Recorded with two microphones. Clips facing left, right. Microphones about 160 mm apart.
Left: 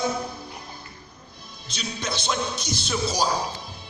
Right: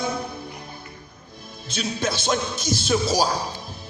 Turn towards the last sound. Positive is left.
turn(degrees=-45)  # may be behind; listen again after turning